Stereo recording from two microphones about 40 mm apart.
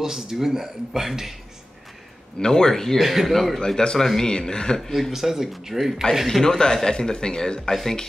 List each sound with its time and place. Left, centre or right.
0.0 s speech: centre
2.4 s speech: centre
3.0 s speech: centre
3.5 s speech: centre
5.1 s speech: centre
6.4 s speech: centre
7.7 s speech: centre